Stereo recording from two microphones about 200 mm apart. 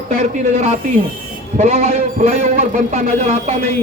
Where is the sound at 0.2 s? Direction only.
30° right (ahead or behind).